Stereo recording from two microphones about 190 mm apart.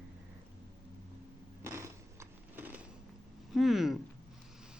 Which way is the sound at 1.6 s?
15° right (ahead or behind).